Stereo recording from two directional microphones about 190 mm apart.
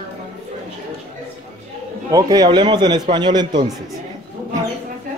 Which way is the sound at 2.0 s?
20° right (ahead or behind).